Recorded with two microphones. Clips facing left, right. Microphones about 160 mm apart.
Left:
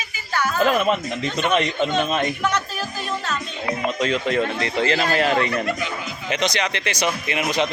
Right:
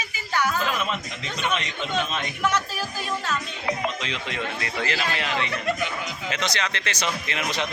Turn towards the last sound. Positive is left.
turn(degrees=15)  # may be behind; listen again after turning